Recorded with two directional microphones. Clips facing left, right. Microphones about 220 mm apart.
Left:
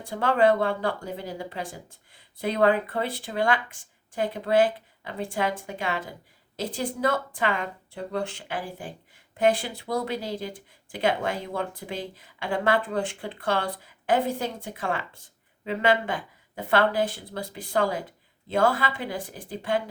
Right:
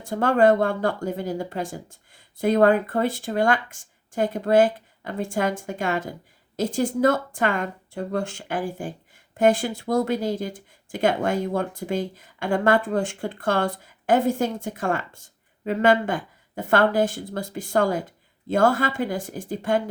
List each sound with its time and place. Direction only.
0.0 s a woman's voice: 45° right (ahead or behind)